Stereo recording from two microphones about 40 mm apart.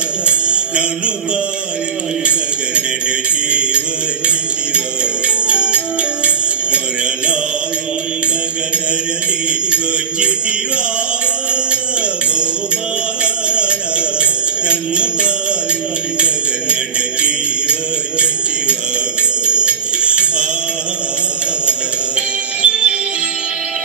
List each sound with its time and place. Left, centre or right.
0.3 s music: right
5.5 s jingle bell: right
13.2 s music: right
19.4 s music: right
22.6 s music: right